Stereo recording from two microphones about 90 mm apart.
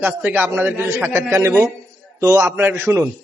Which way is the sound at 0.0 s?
20° right (ahead or behind).